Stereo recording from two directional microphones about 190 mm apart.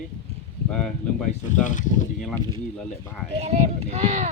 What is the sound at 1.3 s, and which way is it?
Speech, 40° left (ahead or behind).